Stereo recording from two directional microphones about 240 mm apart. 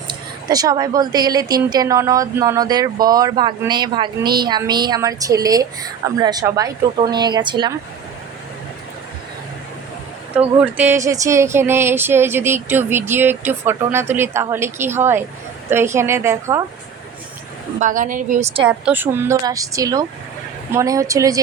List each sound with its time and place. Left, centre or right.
0.4 s speech: centre
10.6 s speech: centre
17.7 s a woman's voice: right
18.6 s speech: centre